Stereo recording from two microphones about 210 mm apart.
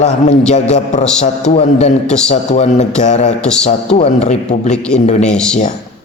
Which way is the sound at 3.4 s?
5° left (ahead or behind).